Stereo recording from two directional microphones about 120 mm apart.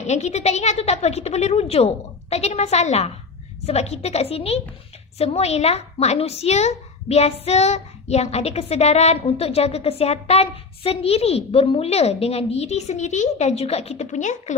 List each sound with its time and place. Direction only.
0.0 s speech: 70° left (ahead or behind); by 14.5 s 85° left